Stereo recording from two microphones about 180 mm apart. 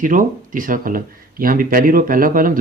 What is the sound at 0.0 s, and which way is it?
Speech, 50° right (ahead or behind).